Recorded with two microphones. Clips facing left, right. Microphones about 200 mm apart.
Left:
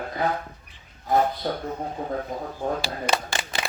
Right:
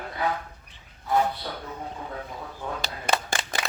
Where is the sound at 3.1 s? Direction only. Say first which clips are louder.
Even; 55° right (ahead or behind).